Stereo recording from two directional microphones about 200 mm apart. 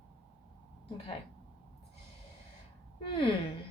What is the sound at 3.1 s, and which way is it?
Speech, 25° left (ahead or behind).